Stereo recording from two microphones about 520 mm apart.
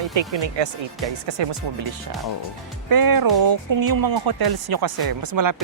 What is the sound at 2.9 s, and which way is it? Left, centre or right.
Speech, right.